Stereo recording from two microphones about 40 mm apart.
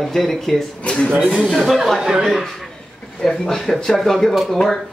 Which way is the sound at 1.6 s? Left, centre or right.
Centre.